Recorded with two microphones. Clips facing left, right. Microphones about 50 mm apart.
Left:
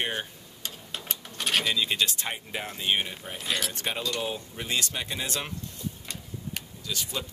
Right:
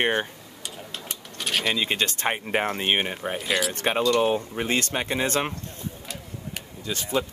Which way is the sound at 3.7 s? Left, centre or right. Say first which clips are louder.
Right 9 dB; right.